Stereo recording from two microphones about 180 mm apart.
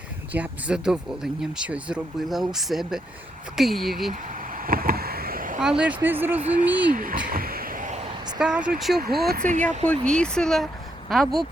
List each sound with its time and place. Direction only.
0.3 s speech: 5° right (ahead or behind)
4.1 s a sound: 50° right (ahead or behind)
5.5 s speech: 5° right (ahead or behind)
6.9 s speech: 50° right (ahead or behind)
7.3 s a sound: 55° right (ahead or behind)
8.4 s speech: 5° right (ahead or behind)
9.0 s speech: 60° right (ahead or behind)
9.5 s speech: 45° right (ahead or behind)
9.8 s speech: 5° left (ahead or behind)